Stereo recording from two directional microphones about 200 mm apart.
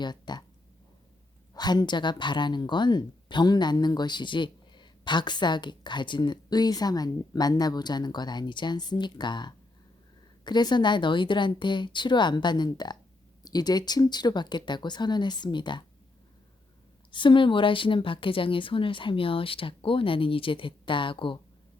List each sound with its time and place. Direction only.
0.0 s speech: 20° left (ahead or behind)
1.5 s speech: 20° left (ahead or behind)
17.1 s speech: 25° left (ahead or behind)